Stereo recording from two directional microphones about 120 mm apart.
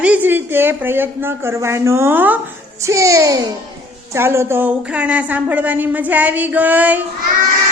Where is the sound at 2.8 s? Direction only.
25° right (ahead or behind).